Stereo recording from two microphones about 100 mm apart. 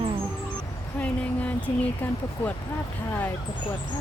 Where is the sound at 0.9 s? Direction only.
15° left (ahead or behind).